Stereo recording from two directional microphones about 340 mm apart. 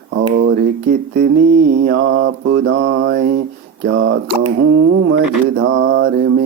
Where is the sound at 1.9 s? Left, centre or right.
Right.